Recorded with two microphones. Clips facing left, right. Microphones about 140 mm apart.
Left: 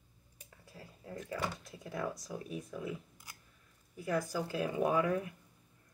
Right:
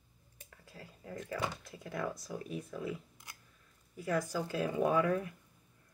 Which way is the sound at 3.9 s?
15° left (ahead or behind).